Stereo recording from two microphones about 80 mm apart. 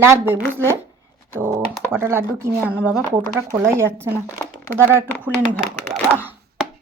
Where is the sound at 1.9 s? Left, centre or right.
Right.